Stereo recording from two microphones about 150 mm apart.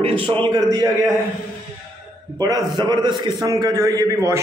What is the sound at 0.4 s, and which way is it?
Speech, 25° right (ahead or behind).